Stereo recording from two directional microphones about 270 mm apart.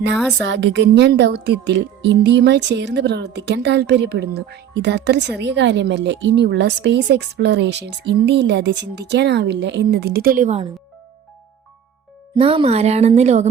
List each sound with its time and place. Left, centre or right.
0.4 s speech: right
12.4 s speech: right